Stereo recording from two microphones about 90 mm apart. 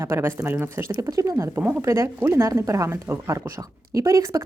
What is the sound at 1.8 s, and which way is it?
Speech, 30° right (ahead or behind).